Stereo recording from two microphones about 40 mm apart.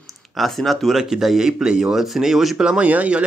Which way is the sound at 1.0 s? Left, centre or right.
Centre.